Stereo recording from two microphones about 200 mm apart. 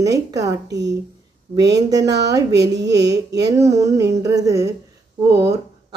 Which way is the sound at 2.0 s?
55° right (ahead or behind).